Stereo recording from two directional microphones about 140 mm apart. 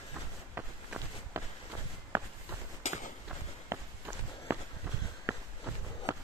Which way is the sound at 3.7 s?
20° right (ahead or behind).